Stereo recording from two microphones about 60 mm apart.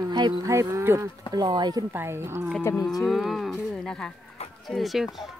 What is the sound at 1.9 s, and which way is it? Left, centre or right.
Cattle, right.